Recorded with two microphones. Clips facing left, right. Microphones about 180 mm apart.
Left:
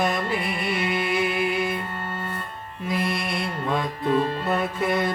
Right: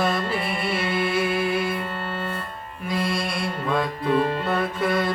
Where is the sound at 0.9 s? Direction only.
20° left (ahead or behind).